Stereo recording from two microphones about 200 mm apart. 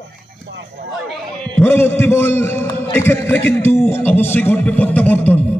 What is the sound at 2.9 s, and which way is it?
A man's voice, 10° left (ahead or behind).